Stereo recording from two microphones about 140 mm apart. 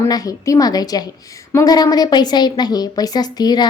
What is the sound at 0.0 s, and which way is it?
A woman's voice, 25° left (ahead or behind).